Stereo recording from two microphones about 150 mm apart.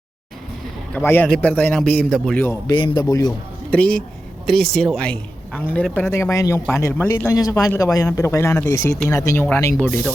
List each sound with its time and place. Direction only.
0.9 s a man's voice: 15° left (ahead or behind)
2.4 s a man's voice: 15° left (ahead or behind)
2.7 s a man's voice: 30° left (ahead or behind)
3.7 s a man's voice: 10° left (ahead or behind)